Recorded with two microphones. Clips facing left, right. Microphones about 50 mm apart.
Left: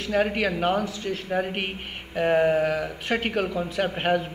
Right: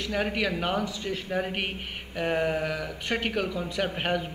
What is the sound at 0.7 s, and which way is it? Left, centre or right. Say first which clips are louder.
A man's voice: left 3 dB; centre.